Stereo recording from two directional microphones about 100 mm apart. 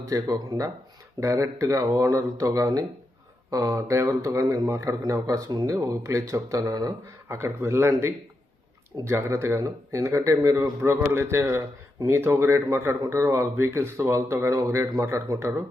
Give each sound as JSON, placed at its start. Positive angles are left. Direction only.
{"t": 0.0, "sound": "speech", "side_deg": -35}
{"t": 7.3, "sound": "speech", "side_deg": -25}